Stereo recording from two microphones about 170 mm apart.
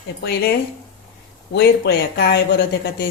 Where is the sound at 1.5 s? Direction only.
75° left (ahead or behind).